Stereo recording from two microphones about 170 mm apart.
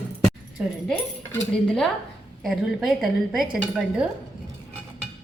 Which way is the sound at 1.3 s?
5° left (ahead or behind).